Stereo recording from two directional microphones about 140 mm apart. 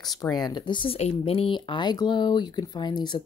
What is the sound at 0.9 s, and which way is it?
Speech, 45° left (ahead or behind).